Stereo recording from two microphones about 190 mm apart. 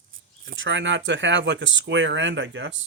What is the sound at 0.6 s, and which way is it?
Speech, 75° right (ahead or behind).